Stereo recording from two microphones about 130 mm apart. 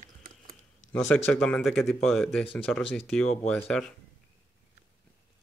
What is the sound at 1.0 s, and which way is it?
Speech, 10° left (ahead or behind).